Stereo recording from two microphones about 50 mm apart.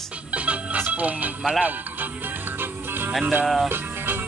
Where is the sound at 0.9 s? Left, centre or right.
Right.